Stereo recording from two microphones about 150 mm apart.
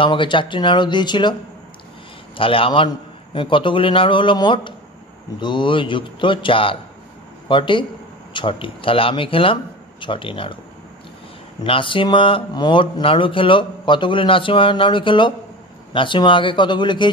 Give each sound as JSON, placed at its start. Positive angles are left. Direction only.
{"t": 0.0, "sound": "speech", "side_deg": 35}
{"t": 2.3, "sound": "speech", "side_deg": 35}
{"t": 11.6, "sound": "speech", "side_deg": 35}